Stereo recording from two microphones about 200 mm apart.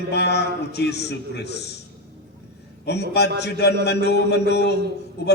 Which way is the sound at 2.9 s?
55° left (ahead or behind).